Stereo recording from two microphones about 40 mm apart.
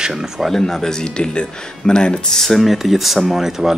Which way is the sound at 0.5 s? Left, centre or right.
Centre.